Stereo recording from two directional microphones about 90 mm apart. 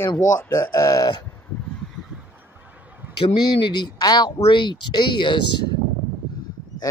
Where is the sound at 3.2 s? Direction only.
60° left (ahead or behind).